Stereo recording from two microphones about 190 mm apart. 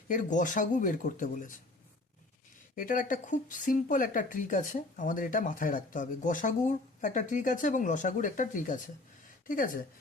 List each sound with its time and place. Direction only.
0.1 s speech: 45° left (ahead or behind)
2.7 s speech: 45° left (ahead or behind)